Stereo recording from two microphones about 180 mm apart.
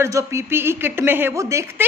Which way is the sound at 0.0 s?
15° right (ahead or behind).